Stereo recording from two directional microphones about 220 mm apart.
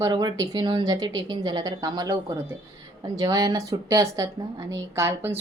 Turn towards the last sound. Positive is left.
turn(degrees=-10)  # may be behind; listen again after turning